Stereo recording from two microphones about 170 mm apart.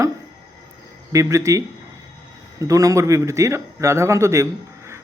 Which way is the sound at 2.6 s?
20° right (ahead or behind).